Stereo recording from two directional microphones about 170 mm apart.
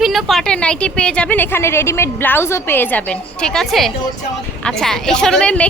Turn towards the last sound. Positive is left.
turn(degrees=5)  # may be behind; listen again after turning